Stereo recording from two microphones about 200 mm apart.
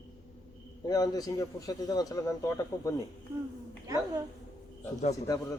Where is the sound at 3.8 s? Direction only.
15° right (ahead or behind).